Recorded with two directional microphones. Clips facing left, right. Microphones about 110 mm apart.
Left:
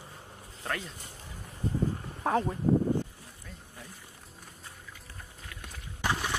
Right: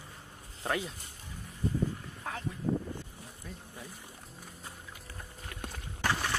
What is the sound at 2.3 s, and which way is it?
Speech, 40° left (ahead or behind).